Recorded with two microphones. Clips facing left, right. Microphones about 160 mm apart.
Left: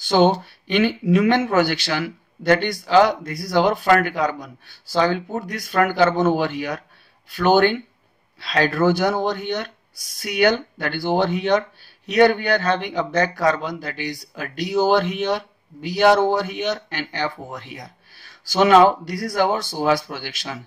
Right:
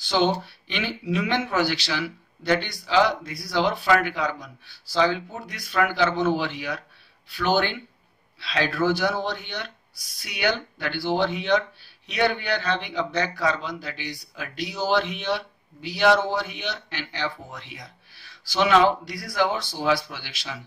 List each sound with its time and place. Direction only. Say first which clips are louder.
0.0 s a man's voice: left 6 dB; 50° left (ahead or behind)